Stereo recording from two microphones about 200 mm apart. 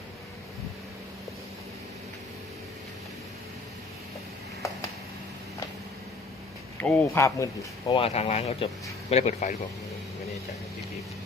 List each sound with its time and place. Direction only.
6.8 s speech: 10° left (ahead or behind); by 9.6 s 35° left (ahead or behind)